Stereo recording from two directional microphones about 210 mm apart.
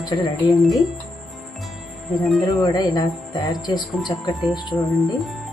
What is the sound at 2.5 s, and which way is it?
Speech, 15° left (ahead or behind).